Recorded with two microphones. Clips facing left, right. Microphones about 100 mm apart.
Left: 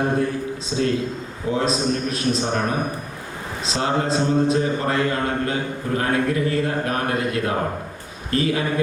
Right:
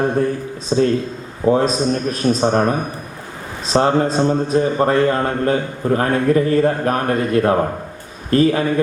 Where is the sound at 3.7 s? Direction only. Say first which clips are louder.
Right 7 dB; 45° right (ahead or behind).